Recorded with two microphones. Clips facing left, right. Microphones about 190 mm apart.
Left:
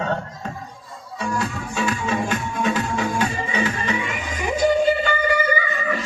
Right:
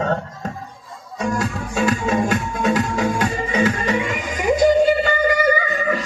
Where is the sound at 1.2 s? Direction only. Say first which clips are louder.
Right 3 dB; 45° right (ahead or behind).